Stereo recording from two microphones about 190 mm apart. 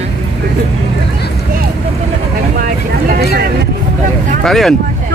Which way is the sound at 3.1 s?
55° right (ahead or behind).